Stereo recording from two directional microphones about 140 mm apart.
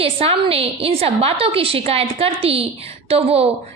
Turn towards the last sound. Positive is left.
turn(degrees=-45)  # may be behind; listen again after turning